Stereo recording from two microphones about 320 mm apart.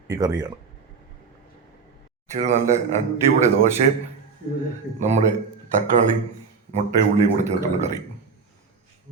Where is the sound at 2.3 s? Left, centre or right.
Right.